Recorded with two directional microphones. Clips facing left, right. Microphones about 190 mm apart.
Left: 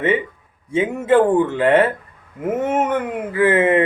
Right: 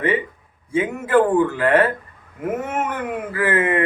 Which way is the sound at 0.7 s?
25° left (ahead or behind).